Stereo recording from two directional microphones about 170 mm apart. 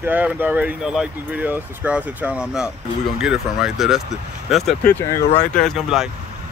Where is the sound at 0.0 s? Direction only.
10° right (ahead or behind).